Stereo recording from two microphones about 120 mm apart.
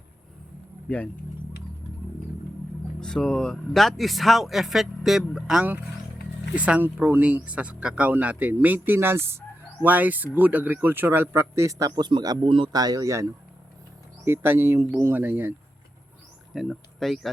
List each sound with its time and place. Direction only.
0.9 s speech: 10° left (ahead or behind)
3.0 s a man's voice: 5° left (ahead or behind); by 13.2 s 30° right (ahead or behind)
14.3 s a man's voice: 20° right (ahead or behind)
16.6 s speech: centre (ahead or behind)